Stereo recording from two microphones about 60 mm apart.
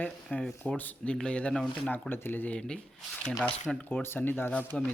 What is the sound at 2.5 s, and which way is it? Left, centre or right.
Speech, centre.